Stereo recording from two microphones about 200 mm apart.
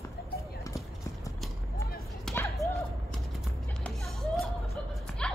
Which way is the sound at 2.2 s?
10° left (ahead or behind).